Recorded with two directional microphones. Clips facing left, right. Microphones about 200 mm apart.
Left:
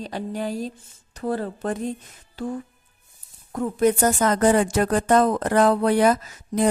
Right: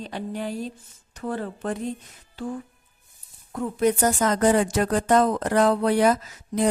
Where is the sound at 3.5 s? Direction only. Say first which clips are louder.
Left 2 dB; 45° left (ahead or behind).